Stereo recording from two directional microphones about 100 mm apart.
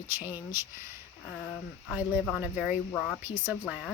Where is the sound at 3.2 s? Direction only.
20° right (ahead or behind).